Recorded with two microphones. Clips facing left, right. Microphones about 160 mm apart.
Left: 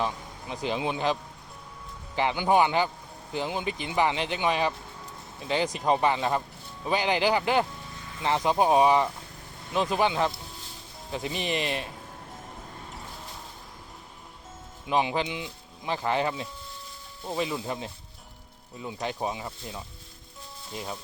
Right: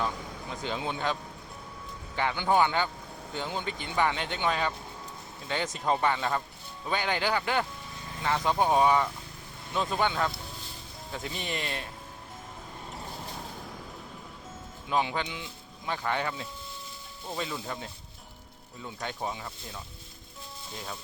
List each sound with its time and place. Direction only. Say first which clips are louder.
0.5 s a man's voice: left 4 dB; 20° left (ahead or behind)
2.1 s a man's voice: left 3 dB; 15° left (ahead or behind)
14.8 s a man's voice: left 3 dB; 20° left (ahead or behind)